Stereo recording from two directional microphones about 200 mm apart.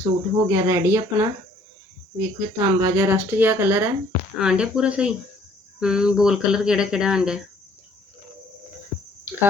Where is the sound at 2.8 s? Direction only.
10° right (ahead or behind).